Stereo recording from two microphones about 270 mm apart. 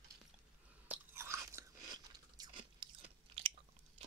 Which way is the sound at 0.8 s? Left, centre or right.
Centre.